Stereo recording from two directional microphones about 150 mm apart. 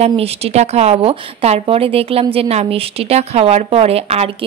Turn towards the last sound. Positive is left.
turn(degrees=-45)  # may be behind; listen again after turning